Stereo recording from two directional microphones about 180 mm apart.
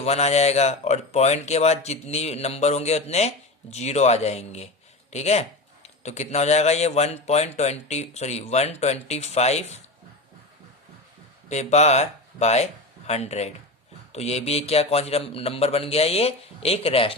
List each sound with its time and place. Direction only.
0.0 s speech: 35° left (ahead or behind)
11.4 s speech: 40° left (ahead or behind)